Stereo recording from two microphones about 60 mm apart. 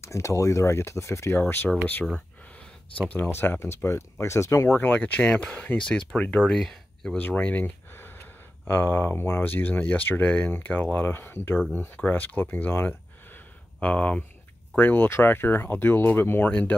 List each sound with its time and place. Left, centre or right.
0.0 s speech: left
3.2 s speech: left
4.7 s speech: left
6.5 s speech: centre
7.2 s speech: left
9.4 s speech: left
12.8 s a sound: left
14.8 s speech: left
16.4 s speech: left